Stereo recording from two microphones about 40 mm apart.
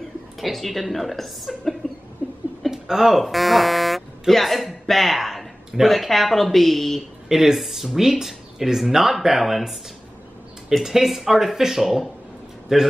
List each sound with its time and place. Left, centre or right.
0.4 s a woman's voice: centre
1.8 s a sound: centre
2.7 s a woman's voice: centre
7.2 s speech: centre
10.8 s speech: centre